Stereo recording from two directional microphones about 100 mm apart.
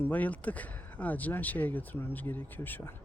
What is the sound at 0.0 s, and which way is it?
Speech, 15° left (ahead or behind).